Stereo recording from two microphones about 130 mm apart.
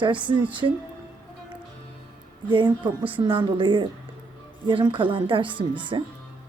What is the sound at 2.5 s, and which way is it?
A woman's voice, 35° right (ahead or behind).